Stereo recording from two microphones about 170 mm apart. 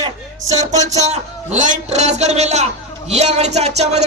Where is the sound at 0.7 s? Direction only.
40° right (ahead or behind).